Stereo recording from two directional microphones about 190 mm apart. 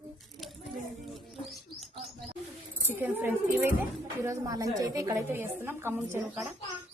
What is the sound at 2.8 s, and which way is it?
A woman's voice, 10° right (ahead or behind).